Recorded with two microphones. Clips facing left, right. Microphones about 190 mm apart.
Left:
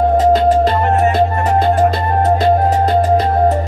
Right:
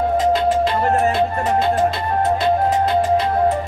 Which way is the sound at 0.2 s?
40° left (ahead or behind).